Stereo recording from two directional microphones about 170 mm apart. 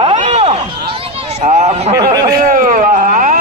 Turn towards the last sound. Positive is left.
turn(degrees=-50)  # may be behind; listen again after turning